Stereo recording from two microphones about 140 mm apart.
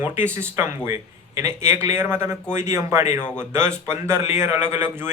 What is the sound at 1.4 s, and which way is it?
A man's voice, 20° right (ahead or behind).